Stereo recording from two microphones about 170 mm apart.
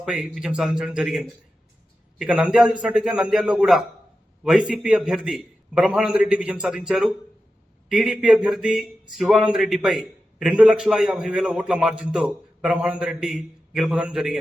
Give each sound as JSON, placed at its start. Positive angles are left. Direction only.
{"t": 0.0, "sound": "a man's voice", "side_deg": -5}